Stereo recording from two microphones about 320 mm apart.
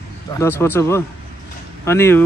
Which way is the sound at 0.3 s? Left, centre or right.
Centre.